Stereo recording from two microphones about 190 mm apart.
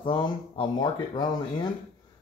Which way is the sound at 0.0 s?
25° left (ahead or behind).